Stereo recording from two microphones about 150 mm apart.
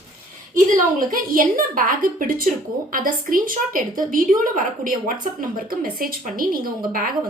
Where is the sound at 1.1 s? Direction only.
70° right (ahead or behind).